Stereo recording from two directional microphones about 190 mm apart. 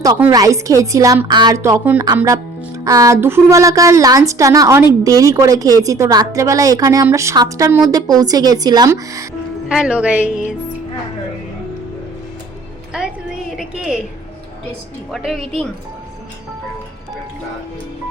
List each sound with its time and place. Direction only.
0.3 s a woman's voice: 20° right (ahead or behind)
9.6 s a woman's voice: 5° right (ahead or behind)
12.9 s a sound: 5° right (ahead or behind)
13.6 s a woman's voice: centre (ahead or behind)
15.1 s a woman's voice: centre (ahead or behind)